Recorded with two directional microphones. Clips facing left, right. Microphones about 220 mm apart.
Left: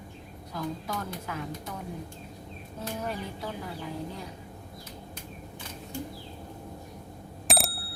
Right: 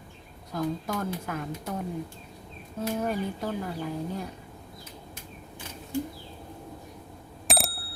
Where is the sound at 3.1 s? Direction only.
50° right (ahead or behind).